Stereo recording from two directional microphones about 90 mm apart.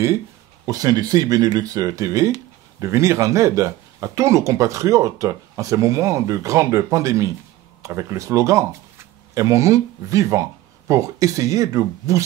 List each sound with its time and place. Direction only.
0.7 s speech: 45° right (ahead or behind)